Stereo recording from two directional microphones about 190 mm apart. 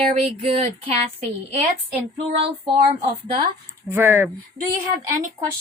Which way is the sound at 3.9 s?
10° right (ahead or behind).